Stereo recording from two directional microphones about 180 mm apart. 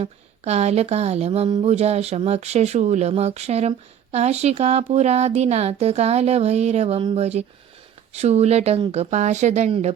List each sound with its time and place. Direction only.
0.0 s speech: 35° right (ahead or behind)